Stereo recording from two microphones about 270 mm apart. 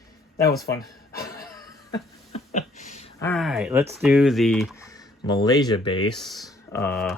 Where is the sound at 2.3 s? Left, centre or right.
Left.